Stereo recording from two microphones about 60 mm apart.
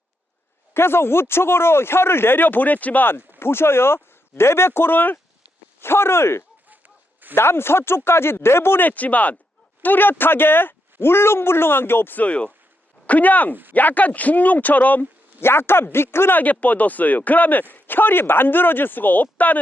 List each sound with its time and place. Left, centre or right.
0.7 s speech: left
6.7 s a sound: right
7.3 s speech: left
8.9 s speech: left
12.2 s speech: centre
15.4 s speech: left
16.4 s speech: left